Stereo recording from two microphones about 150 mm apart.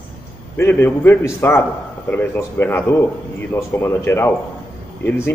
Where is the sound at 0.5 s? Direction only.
15° left (ahead or behind).